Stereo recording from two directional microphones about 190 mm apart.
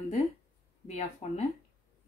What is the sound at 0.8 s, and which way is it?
Speech, 40° left (ahead or behind).